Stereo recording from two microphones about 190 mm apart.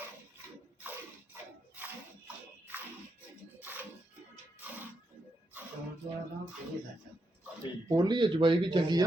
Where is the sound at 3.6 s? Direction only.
10° right (ahead or behind).